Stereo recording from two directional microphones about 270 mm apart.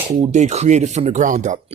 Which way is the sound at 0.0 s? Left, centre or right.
Right.